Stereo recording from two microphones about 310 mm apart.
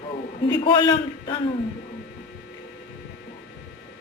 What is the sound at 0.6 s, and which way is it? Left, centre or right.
Speech, centre.